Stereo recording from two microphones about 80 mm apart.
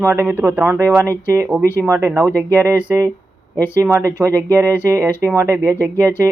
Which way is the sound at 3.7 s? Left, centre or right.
Right.